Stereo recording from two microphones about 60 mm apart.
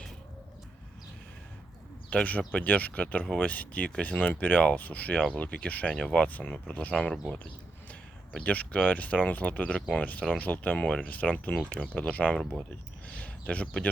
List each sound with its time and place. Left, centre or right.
2.0 s speech: left
8.4 s speech: left